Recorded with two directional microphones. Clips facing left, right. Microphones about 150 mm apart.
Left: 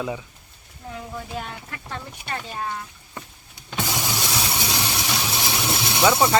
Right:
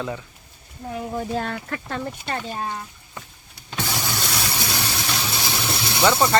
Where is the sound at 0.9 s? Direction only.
30° right (ahead or behind).